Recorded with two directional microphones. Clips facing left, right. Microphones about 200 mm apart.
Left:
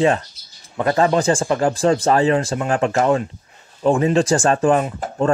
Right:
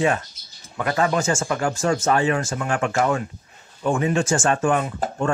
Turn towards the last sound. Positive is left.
turn(degrees=35)  # may be behind; listen again after turning